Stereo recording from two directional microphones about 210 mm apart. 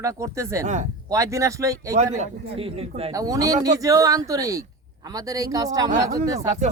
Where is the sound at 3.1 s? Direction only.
15° right (ahead or behind).